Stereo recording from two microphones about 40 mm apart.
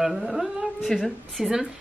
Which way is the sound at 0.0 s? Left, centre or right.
Centre.